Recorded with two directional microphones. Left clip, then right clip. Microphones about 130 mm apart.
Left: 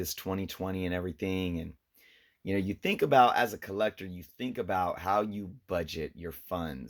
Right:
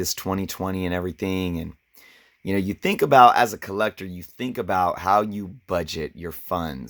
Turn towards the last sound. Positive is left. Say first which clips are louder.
# right 9 dB
turn(degrees=-55)  # may be behind; listen again after turning